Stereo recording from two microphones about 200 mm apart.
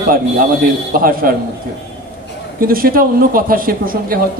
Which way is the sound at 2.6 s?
45° right (ahead or behind).